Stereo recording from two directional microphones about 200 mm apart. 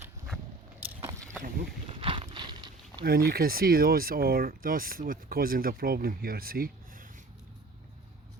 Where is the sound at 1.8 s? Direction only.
25° right (ahead or behind).